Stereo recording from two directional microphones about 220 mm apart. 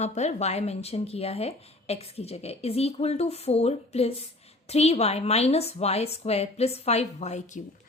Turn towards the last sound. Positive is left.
turn(degrees=35)  # may be behind; listen again after turning